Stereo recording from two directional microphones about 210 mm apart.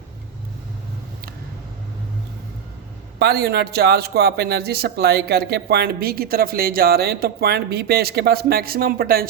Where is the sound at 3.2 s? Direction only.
50° right (ahead or behind).